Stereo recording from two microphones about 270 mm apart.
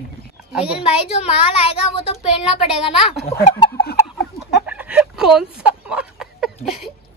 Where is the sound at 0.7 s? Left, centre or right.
Left.